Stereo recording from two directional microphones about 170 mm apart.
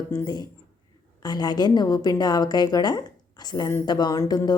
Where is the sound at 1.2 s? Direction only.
25° left (ahead or behind).